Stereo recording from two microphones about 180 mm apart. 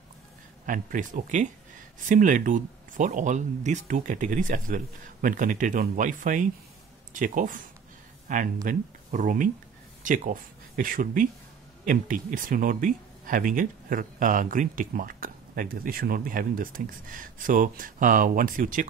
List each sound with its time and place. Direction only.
0.7 s speech: 45° right (ahead or behind)